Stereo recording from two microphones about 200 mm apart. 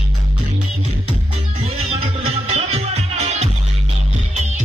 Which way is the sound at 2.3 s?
30° right (ahead or behind).